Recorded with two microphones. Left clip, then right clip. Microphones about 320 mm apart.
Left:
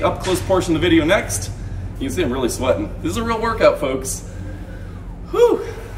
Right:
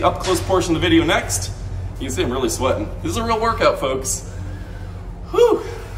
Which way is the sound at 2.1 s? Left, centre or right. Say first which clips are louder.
Even; centre.